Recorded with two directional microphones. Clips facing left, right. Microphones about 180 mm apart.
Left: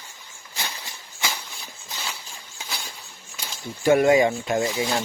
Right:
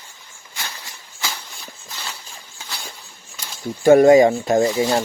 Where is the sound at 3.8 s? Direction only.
40° right (ahead or behind).